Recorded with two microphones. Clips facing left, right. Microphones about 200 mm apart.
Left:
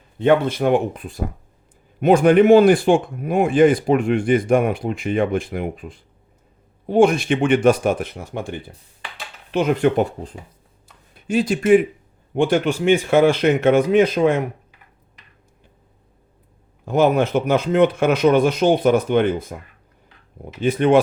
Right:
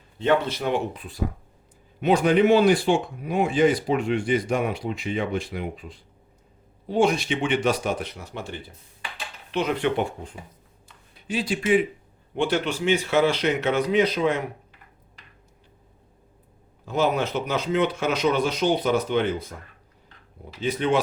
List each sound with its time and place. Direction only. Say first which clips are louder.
0.2 s speech: left 6 dB; 50° left (ahead or behind)
16.8 s speech: left 7 dB; 55° left (ahead or behind)